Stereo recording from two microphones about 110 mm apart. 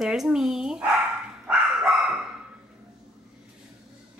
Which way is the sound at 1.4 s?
5° right (ahead or behind).